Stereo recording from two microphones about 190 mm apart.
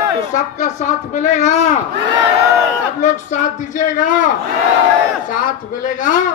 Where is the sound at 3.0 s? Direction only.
40° left (ahead or behind).